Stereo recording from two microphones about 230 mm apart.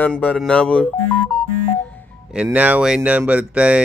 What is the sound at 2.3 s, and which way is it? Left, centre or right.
Speech, centre.